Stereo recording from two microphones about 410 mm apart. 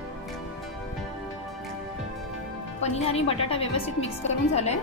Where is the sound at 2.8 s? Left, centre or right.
Centre.